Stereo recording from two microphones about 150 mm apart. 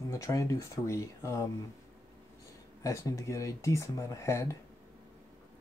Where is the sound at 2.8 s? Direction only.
20° left (ahead or behind).